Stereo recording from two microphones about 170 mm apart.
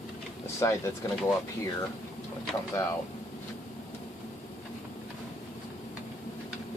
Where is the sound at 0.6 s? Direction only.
20° left (ahead or behind).